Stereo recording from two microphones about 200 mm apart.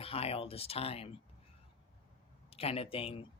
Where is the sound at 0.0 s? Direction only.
30° left (ahead or behind).